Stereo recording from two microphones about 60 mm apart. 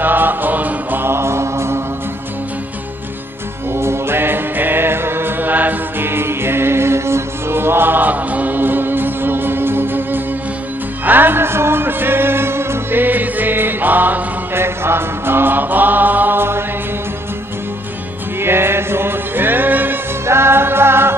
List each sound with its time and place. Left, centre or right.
0.0 s music: right
1.0 s mantra: right
3.7 s music: right
14.6 s chant: right
18.4 s music: right
20.2 s music: right